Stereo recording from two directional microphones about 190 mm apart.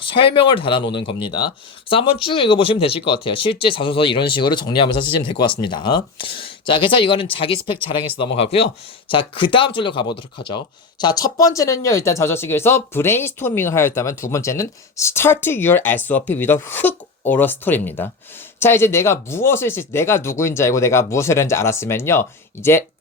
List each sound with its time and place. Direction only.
0.0 s speech: 25° left (ahead or behind)